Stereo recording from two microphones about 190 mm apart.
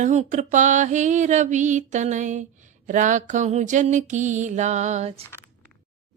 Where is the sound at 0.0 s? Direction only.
40° right (ahead or behind).